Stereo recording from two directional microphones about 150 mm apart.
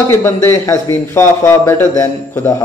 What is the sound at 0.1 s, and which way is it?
Speech, 15° left (ahead or behind).